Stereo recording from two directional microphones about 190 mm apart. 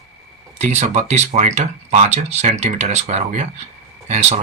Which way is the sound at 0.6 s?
35° right (ahead or behind).